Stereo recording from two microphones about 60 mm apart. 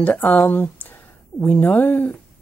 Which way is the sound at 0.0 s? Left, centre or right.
Left.